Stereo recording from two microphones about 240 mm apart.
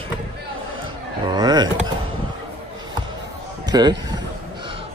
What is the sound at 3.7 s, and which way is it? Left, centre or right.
Speech, centre.